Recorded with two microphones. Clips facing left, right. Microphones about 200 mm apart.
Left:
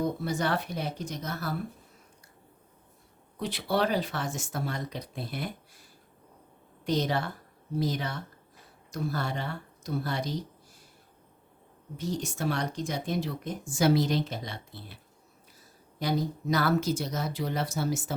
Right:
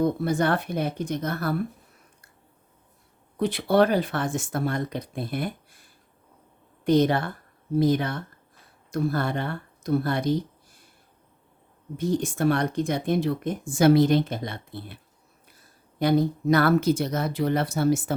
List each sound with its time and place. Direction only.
0.0 s speech: 55° right (ahead or behind)
3.3 s speech: 55° right (ahead or behind)
6.8 s speech: 55° right (ahead or behind)
11.9 s speech: 55° right (ahead or behind)
16.0 s speech: 60° right (ahead or behind)